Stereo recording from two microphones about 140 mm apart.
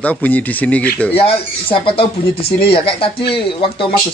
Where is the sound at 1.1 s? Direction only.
40° left (ahead or behind).